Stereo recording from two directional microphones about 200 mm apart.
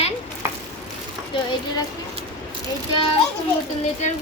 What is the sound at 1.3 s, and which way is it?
Speech, 25° left (ahead or behind).